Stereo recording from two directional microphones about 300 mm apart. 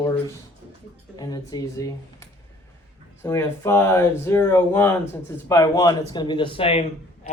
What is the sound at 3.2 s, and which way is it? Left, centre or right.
Speech, centre.